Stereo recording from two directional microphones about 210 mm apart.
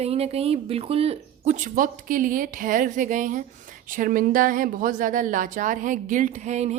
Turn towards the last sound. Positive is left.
turn(degrees=-30)  # may be behind; listen again after turning